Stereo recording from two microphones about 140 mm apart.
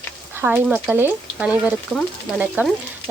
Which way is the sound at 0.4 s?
15° right (ahead or behind).